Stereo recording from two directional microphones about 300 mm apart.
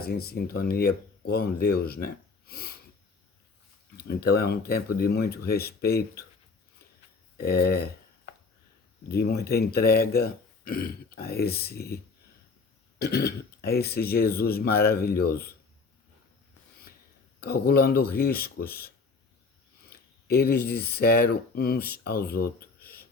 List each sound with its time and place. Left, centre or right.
0.0 s speech: left
2.5 s sniff: left
3.9 s speech: left
7.3 s speech: left
9.0 s speech: left
13.0 s speech: left
17.4 s speech: left